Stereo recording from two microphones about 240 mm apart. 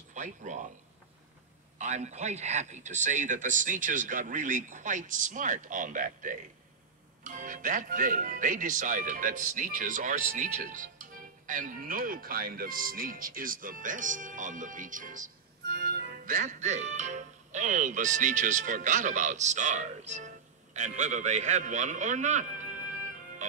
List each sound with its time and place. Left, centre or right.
0.1 s speech: right
1.8 s speech: right